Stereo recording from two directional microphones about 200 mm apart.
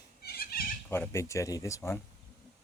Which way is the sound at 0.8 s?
10° left (ahead or behind).